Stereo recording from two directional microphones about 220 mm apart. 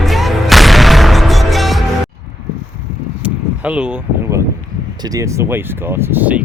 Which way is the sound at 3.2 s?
5° right (ahead or behind).